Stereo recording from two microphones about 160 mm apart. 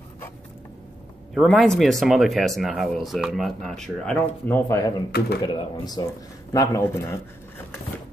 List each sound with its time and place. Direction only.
1.3 s speech: centre (ahead or behind); by 7.2 s 15° left (ahead or behind)